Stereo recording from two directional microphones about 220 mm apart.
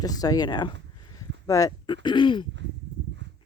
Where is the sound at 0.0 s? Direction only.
15° left (ahead or behind).